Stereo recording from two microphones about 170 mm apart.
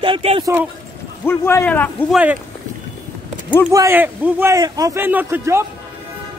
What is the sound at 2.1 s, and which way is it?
Speech, 10° right (ahead or behind).